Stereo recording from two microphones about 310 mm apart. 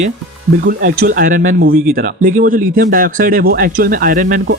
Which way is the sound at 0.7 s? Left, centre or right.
Right.